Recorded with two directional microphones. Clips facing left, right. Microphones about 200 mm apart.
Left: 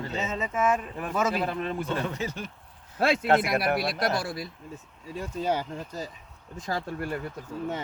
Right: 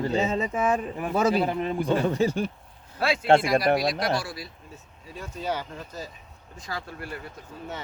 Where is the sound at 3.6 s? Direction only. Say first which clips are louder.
Right 3 dB; 60° left (ahead or behind).